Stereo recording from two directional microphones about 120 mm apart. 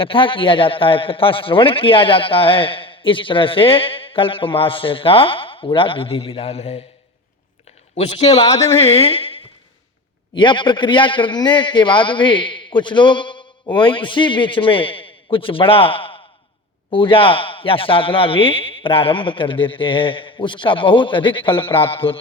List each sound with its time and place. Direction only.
0.0 s a man's voice: 45° left (ahead or behind); by 6.8 s 60° left (ahead or behind)
7.9 s a woman's voice: 60° left (ahead or behind)